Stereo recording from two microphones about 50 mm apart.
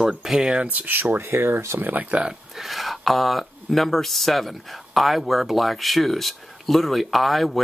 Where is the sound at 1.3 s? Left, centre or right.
Right.